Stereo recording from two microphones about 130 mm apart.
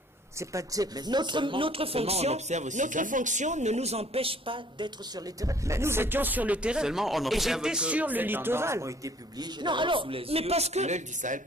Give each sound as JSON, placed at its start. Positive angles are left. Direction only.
{"t": 0.4, "sound": "speech", "side_deg": -25}